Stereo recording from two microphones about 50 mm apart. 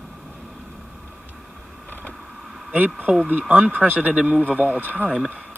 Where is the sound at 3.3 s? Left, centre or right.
Right.